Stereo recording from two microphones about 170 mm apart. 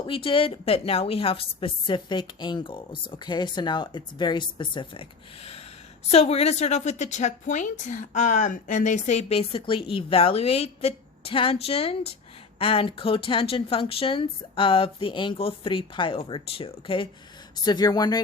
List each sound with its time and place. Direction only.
0.0 s a woman's voice: 30° left (ahead or behind)